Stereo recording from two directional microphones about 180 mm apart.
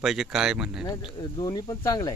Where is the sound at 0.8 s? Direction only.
20° left (ahead or behind).